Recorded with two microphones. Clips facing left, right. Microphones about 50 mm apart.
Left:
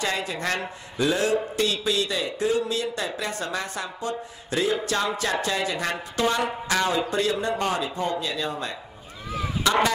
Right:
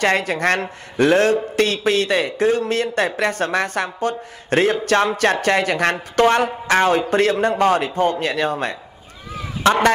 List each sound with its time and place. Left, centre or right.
0.0 s a man's voice: right
9.6 s fowl: right